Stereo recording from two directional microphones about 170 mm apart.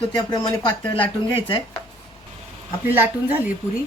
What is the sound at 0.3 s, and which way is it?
Speech, 30° left (ahead or behind).